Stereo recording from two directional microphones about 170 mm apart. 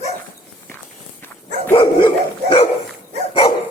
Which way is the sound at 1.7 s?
30° left (ahead or behind).